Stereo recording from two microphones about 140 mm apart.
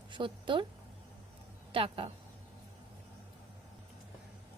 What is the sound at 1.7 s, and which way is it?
Speech, 40° right (ahead or behind).